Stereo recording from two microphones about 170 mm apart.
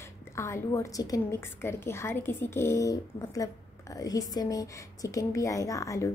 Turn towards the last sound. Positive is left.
turn(degrees=20)  # may be behind; listen again after turning